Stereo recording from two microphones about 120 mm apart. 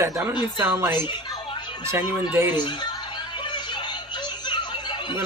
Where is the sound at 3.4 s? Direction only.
40° left (ahead or behind).